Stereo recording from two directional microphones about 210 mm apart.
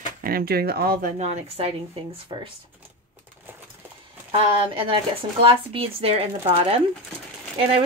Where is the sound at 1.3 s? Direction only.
30° right (ahead or behind).